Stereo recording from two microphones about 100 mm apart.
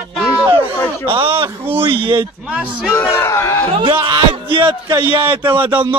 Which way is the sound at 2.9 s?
25° left (ahead or behind).